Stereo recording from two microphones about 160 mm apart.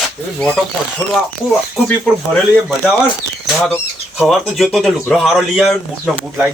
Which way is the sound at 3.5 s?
Centre (ahead or behind).